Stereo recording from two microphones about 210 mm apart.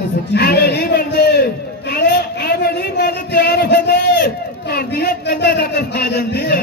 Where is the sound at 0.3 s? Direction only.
50° left (ahead or behind).